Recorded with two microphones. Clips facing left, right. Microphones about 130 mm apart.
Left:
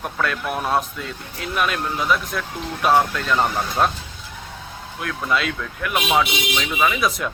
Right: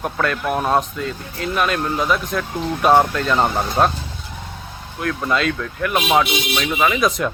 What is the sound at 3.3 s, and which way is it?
Speech, 25° right (ahead or behind).